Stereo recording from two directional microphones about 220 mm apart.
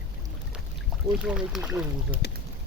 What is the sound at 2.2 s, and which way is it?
Speech, 45° left (ahead or behind).